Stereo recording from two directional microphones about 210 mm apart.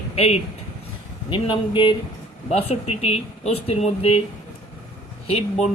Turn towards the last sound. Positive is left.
turn(degrees=30)  # may be behind; listen again after turning